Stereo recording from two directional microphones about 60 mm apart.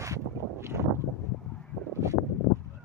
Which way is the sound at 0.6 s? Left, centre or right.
Right.